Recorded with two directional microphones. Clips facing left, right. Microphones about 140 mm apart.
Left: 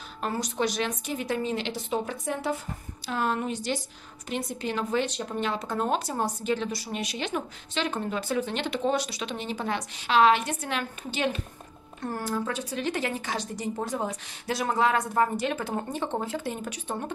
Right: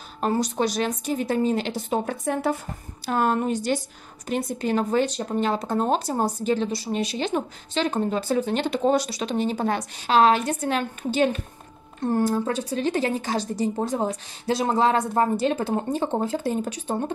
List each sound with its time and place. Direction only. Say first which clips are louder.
0.2 s a woman's voice: right 5 dB; 35° right (ahead or behind)
12.0 s speech: right 8 dB; 25° right (ahead or behind)